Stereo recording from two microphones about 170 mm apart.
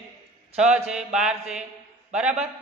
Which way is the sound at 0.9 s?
5° right (ahead or behind).